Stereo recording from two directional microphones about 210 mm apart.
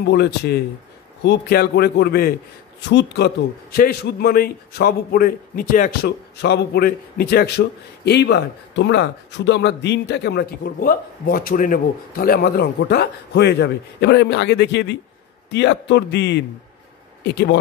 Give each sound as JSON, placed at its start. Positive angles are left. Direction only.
{"t": 0.0, "sound": "a man's voice", "side_deg": 50}